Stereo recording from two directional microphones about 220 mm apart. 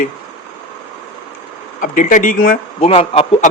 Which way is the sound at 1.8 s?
35° left (ahead or behind).